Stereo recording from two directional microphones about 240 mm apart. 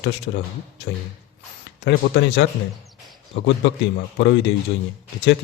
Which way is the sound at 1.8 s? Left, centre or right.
Left.